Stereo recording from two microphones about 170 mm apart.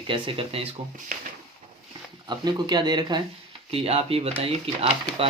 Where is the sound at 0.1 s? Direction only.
30° right (ahead or behind).